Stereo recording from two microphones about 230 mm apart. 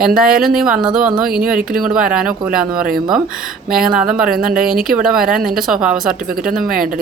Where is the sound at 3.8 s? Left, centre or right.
Centre.